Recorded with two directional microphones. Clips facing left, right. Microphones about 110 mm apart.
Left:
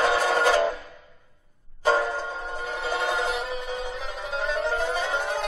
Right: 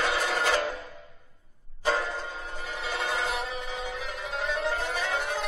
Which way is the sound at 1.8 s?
30° left (ahead or behind).